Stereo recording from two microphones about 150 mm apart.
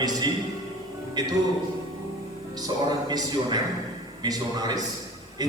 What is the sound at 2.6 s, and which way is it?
A man's voice, 25° right (ahead or behind).